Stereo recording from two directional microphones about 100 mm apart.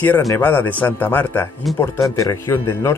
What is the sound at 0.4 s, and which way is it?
Speech, 20° left (ahead or behind).